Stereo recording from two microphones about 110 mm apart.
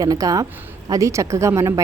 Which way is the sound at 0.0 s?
30° right (ahead or behind).